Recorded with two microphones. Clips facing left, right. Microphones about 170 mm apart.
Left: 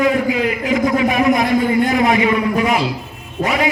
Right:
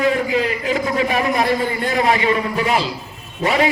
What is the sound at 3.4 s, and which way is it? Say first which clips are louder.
Speech: even; 65° left (ahead or behind).